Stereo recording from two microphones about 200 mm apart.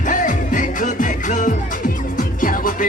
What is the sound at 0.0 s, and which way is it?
Music, 40° left (ahead or behind).